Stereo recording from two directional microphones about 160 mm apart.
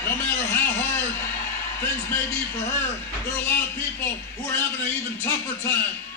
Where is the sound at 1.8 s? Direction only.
15° left (ahead or behind).